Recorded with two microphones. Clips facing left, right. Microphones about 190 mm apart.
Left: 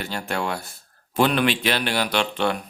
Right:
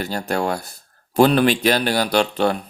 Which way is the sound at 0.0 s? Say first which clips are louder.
Right 5 dB; 40° right (ahead or behind).